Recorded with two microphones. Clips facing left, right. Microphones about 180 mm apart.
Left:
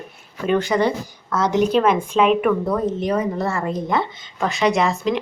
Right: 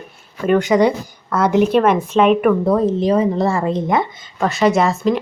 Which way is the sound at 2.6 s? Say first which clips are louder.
Right 6 dB; 30° right (ahead or behind).